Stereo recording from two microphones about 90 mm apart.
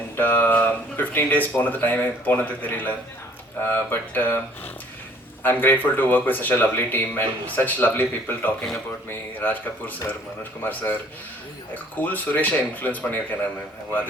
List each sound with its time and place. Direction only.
0.2 s speech: 20° left (ahead or behind)